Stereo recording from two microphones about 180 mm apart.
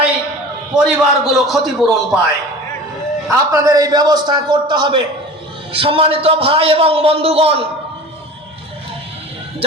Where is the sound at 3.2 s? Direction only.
15° right (ahead or behind); by 7.6 s 35° right (ahead or behind).